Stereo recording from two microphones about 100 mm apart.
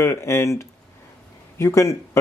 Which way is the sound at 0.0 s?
25° left (ahead or behind).